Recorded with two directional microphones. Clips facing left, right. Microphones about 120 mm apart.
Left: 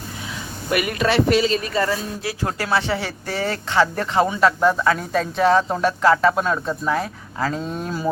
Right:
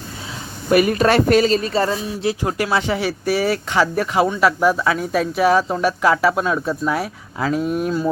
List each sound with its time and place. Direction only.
0.7 s speech: 35° right (ahead or behind)
1.0 s speech: 50° right (ahead or behind); by 7.9 s 15° right (ahead or behind)